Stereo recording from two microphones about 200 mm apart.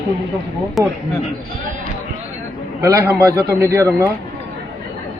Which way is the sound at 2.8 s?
15° right (ahead or behind).